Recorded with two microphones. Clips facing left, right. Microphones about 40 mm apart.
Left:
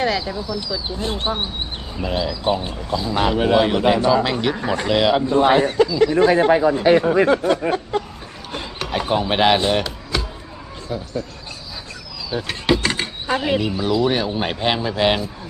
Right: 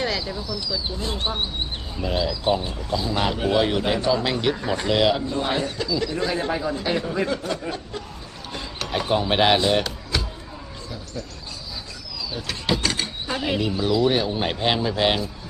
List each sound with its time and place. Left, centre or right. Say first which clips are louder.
0.0 s speech: left 5 dB; centre
1.1 s speech: left 2 dB; centre
4.5 s speech: left 3 dB; centre
5.1 s speech: left 9 dB; left
8.8 s wood: left 2 dB; centre
9.6 s music: left 1 dB; centre
10.8 s speech: left 11 dB; left
12.3 s speech: left 10 dB; centre
12.8 s a sound: left 3 dB; left
13.4 s speech: even; centre